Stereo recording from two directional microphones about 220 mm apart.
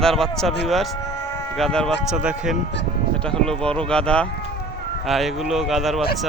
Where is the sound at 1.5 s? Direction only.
5° left (ahead or behind).